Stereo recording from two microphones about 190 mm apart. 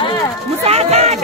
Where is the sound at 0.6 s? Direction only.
35° right (ahead or behind).